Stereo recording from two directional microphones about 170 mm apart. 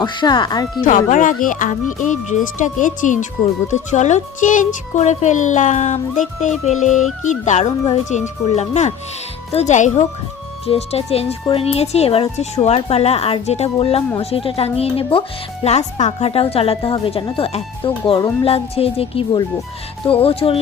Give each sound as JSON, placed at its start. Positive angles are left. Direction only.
{"t": 0.0, "sound": "speech", "side_deg": 25}
{"t": 0.9, "sound": "a child's voice", "side_deg": 50}